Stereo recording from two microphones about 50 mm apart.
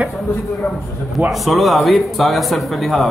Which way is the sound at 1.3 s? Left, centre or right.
Centre.